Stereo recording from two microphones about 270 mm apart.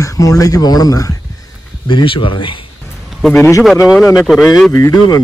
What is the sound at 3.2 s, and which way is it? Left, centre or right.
Speech, centre.